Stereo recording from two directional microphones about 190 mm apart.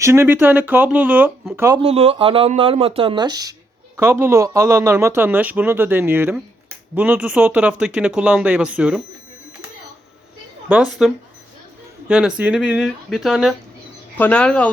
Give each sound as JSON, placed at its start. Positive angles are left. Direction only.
{"t": 0.0, "sound": "speech", "side_deg": -15}
{"t": 1.8, "sound": "speech", "side_deg": -30}
{"t": 10.7, "sound": "speech", "side_deg": -5}